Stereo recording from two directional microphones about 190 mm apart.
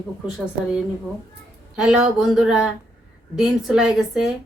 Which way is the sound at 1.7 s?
5° right (ahead or behind).